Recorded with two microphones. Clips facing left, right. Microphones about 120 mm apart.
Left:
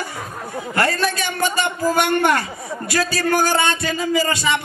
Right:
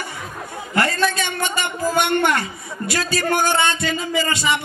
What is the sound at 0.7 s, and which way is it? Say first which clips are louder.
A man's voice: right 1 dB; 25° right (ahead or behind).